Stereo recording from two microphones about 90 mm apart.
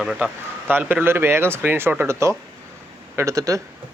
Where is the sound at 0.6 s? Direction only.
20° right (ahead or behind); by 3.6 s 40° right (ahead or behind).